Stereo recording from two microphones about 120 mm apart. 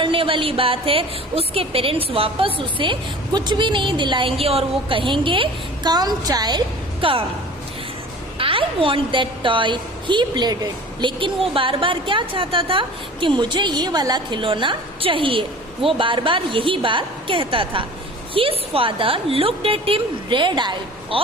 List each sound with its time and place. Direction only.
0.0 s a woman's voice: 50° right (ahead or behind)
7.0 s a woman's voice: 50° right (ahead or behind)
8.4 s a woman's voice: 50° right (ahead or behind)
11.2 s a woman's voice: 45° right (ahead or behind)